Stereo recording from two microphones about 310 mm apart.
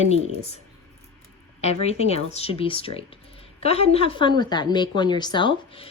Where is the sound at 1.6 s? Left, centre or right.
Centre.